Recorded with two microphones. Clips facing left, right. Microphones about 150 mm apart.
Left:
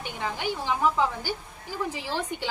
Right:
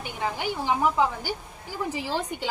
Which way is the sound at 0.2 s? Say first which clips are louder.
Right 2 dB; 15° right (ahead or behind).